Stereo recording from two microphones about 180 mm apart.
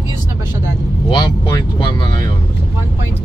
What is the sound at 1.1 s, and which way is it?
Speech, 25° left (ahead or behind).